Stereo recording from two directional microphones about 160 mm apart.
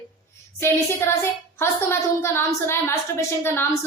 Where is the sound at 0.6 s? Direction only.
15° left (ahead or behind).